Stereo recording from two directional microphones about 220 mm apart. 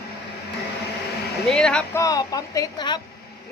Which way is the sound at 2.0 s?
15° left (ahead or behind).